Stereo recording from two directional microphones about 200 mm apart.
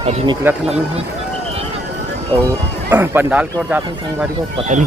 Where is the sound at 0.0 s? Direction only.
30° right (ahead or behind).